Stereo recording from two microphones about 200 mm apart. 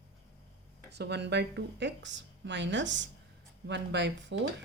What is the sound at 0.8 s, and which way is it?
Speech, 55° right (ahead or behind).